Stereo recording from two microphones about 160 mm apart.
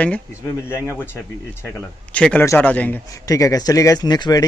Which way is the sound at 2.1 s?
10° left (ahead or behind).